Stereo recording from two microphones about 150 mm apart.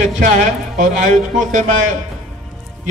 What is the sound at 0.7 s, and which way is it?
A man's voice, 55° right (ahead or behind).